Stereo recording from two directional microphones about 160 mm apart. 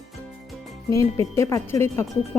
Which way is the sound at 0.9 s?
20° left (ahead or behind).